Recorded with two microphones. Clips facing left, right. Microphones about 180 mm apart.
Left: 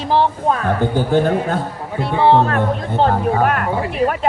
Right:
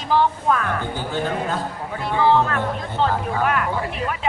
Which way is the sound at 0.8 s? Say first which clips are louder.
Left 9 dB; 50° left (ahead or behind).